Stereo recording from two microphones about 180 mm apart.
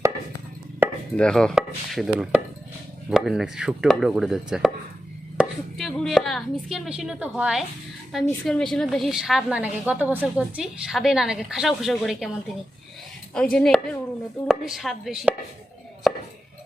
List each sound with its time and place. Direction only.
1.1 s a woman's voice: 5° left (ahead or behind)
13.3 s a woman's voice: 5° left (ahead or behind)